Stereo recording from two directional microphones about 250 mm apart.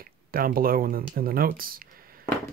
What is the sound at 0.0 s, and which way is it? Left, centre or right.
Speech, right.